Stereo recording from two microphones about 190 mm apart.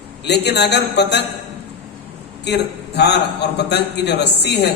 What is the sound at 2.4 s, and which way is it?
A man's voice, 65° left (ahead or behind).